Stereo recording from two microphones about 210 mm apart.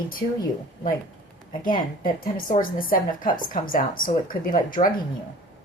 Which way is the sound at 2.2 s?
40° left (ahead or behind).